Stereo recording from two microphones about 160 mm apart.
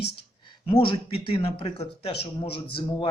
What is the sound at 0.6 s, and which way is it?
Speech, 35° left (ahead or behind).